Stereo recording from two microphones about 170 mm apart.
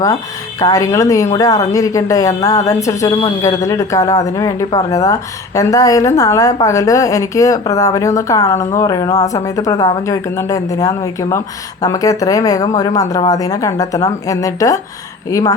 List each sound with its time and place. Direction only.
0.6 s a woman's voice: 20° left (ahead or behind)